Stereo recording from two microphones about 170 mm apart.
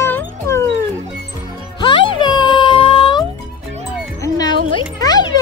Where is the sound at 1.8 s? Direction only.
25° left (ahead or behind).